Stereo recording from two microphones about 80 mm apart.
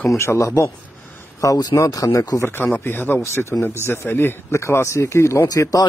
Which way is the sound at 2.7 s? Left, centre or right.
Left.